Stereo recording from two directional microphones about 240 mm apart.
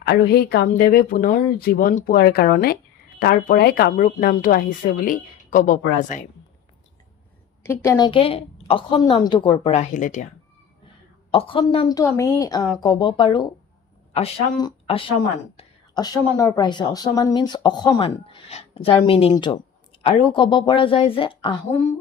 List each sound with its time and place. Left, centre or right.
0.0 s speech: left
7.6 s a woman's voice: centre; by 10.2 s left
11.3 s a woman's voice: left